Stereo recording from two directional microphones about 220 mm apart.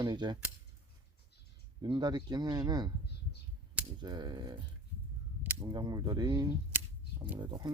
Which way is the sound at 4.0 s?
20° right (ahead or behind).